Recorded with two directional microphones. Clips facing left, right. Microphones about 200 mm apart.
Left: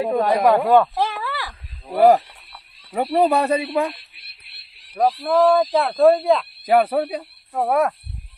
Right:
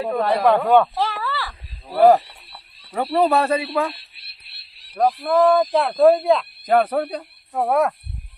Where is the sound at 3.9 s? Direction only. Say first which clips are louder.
Left 2 dB; 30° right (ahead or behind).